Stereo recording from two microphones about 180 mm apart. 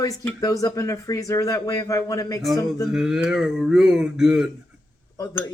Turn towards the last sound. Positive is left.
turn(degrees=20)  # may be behind; listen again after turning